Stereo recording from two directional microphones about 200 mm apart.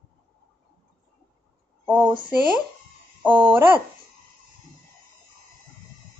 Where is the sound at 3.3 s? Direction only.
25° right (ahead or behind).